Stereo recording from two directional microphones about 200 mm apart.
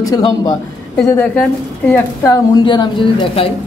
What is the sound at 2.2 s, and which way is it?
A woman's voice, 20° left (ahead or behind).